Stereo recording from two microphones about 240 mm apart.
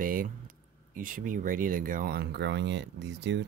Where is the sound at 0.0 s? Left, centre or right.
Right.